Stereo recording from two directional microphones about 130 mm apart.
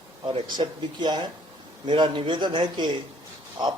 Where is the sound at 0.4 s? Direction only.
35° right (ahead or behind).